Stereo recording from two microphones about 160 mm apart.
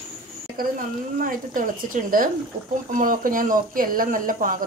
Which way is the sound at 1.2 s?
60° right (ahead or behind).